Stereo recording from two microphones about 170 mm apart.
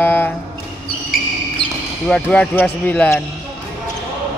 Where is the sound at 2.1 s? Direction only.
5° left (ahead or behind).